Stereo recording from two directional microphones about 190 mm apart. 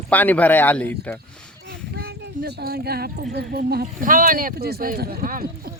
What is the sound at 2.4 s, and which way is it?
Speech, 55° right (ahead or behind).